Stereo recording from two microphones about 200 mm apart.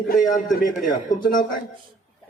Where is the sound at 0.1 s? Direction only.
40° left (ahead or behind).